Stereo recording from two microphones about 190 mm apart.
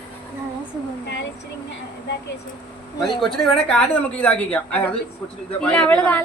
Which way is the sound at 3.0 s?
Centre (ahead or behind).